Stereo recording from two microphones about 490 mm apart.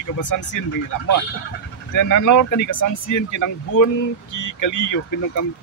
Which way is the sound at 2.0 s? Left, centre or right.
Left.